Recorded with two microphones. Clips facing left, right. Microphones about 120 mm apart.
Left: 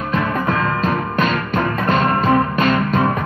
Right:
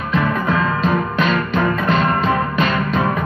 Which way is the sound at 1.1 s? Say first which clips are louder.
Right 1 dB; 45° left (ahead or behind).